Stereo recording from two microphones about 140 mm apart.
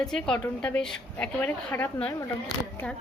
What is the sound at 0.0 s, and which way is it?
A woman's voice, 5° left (ahead or behind).